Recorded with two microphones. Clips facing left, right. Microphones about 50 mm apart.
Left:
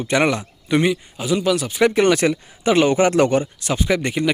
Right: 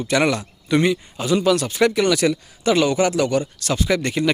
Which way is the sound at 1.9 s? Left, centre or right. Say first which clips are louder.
Left 2 dB; left.